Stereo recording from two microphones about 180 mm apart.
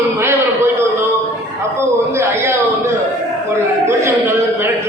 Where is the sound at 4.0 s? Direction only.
15° right (ahead or behind).